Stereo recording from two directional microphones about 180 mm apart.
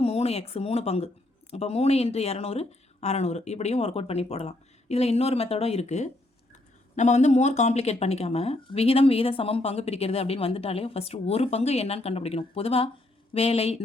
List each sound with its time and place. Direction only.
0.0 s speech: 35° left (ahead or behind)